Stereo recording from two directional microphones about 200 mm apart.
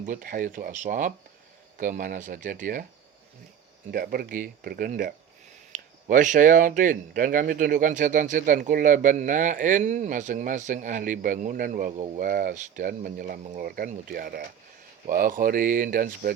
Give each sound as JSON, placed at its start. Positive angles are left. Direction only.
{"t": 0.0, "sound": "speech", "side_deg": -40}
{"t": 3.9, "sound": "speech", "side_deg": -50}